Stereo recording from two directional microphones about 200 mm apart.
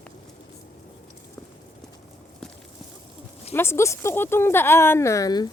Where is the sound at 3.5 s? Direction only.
10° left (ahead or behind).